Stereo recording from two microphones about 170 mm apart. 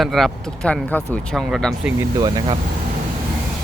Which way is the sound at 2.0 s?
25° right (ahead or behind).